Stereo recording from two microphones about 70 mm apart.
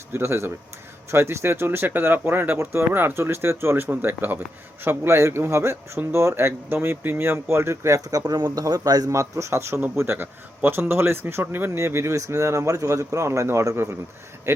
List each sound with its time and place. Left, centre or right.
0.1 s speech: right
8.5 s a man's voice: right